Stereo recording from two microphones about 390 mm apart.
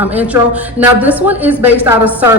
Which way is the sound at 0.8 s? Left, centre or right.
Centre.